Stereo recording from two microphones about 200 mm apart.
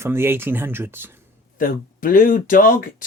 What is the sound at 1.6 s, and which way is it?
Speech, 45° left (ahead or behind).